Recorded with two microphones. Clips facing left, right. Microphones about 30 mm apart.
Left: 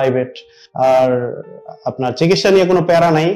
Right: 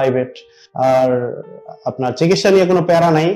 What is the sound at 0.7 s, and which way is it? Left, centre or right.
Speech, left.